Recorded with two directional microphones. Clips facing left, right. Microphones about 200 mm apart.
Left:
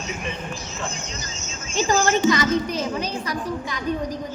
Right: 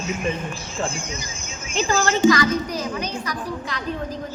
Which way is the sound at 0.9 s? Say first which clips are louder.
Right 2 dB; 10° right (ahead or behind).